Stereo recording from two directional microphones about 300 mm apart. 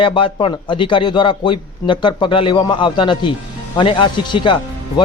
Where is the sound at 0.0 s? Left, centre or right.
Centre.